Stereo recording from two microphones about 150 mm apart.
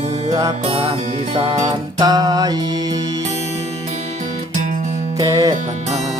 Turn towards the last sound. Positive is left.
turn(degrees=-25)  # may be behind; listen again after turning